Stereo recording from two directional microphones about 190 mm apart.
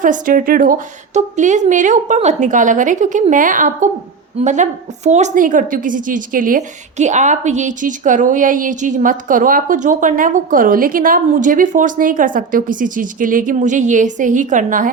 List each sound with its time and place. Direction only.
0.0 s a woman's voice: 45° right (ahead or behind)